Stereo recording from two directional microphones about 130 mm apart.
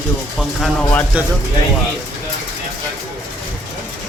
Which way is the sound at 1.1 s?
10° right (ahead or behind).